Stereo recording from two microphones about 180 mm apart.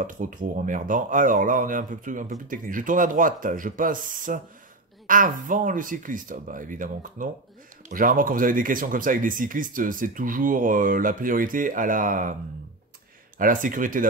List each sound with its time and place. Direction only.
0.0 s speech: 50° right (ahead or behind)
13.4 s speech: 50° right (ahead or behind)